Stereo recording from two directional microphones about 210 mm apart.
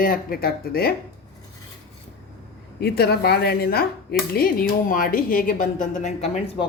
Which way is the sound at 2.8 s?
50° left (ahead or behind).